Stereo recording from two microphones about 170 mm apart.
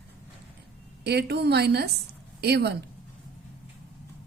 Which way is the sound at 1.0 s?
75° right (ahead or behind).